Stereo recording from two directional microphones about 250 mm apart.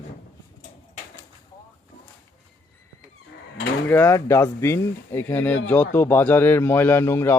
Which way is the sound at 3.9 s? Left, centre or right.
Centre.